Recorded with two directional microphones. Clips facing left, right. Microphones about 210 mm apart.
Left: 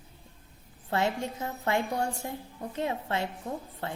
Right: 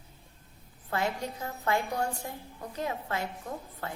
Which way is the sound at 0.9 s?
25° left (ahead or behind).